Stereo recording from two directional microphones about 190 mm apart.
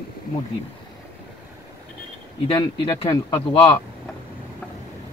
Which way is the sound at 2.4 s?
25° left (ahead or behind).